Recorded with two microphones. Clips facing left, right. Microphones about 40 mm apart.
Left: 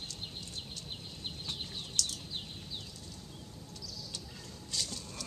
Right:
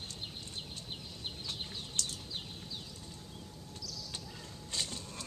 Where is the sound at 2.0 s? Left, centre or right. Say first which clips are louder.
Left 3 dB; right.